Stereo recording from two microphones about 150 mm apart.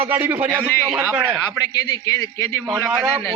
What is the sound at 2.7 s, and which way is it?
Speech, 15° right (ahead or behind).